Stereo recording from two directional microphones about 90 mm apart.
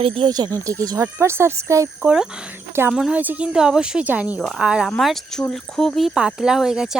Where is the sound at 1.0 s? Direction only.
30° right (ahead or behind).